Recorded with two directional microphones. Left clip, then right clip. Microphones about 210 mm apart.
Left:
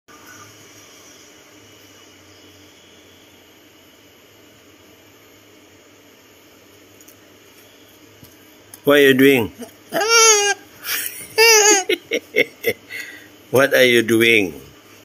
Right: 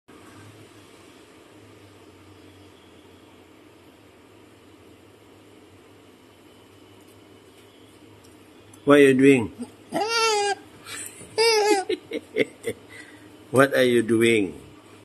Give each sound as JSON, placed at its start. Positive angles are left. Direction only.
{"t": 8.8, "sound": "a man's voice", "side_deg": 25}
{"t": 9.8, "sound": "babbling", "side_deg": -5}
{"t": 11.9, "sound": "a sound", "side_deg": 20}
{"t": 13.5, "sound": "a man's voice", "side_deg": 20}